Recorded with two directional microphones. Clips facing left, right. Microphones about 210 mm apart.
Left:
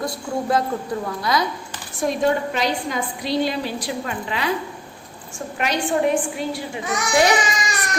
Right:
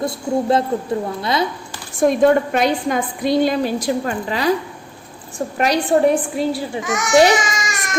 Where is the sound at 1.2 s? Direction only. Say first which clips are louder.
Even; 25° right (ahead or behind).